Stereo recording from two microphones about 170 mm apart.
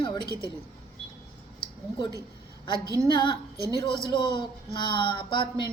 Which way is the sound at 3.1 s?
30° left (ahead or behind).